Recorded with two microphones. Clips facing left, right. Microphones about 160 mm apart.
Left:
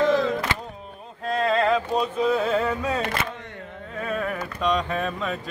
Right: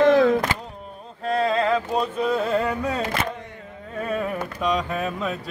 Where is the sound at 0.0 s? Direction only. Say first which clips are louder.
Right 5 dB; 55° right (ahead or behind).